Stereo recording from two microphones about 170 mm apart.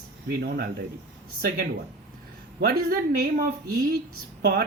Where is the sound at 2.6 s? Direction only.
60° right (ahead or behind).